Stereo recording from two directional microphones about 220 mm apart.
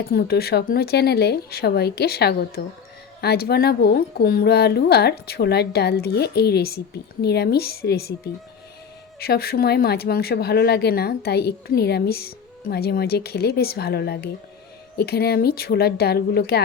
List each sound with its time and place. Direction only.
0.0 s speech: 45° left (ahead or behind)
9.1 s speech: 45° left (ahead or behind)